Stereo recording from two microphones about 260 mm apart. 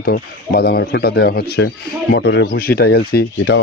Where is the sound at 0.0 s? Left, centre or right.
Left.